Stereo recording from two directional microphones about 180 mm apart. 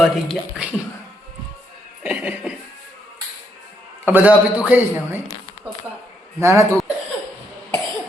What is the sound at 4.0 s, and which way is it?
A man's voice, 10° right (ahead or behind).